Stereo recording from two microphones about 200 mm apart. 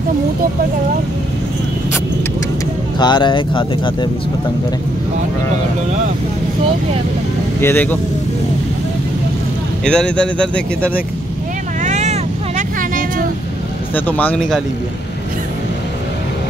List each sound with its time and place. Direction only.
3.0 s speech: 20° left (ahead or behind)
7.6 s speech: 10° left (ahead or behind)
9.8 s speech: 5° left (ahead or behind)
11.8 s vehicle: 35° right (ahead or behind)
13.9 s speech: 10° left (ahead or behind)